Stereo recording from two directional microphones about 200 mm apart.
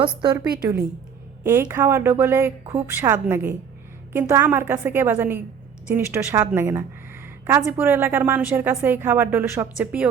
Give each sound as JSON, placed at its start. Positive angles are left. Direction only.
{"t": 0.0, "sound": "a woman's voice", "side_deg": -20}